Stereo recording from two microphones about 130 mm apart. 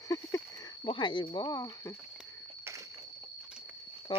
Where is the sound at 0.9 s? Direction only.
40° left (ahead or behind).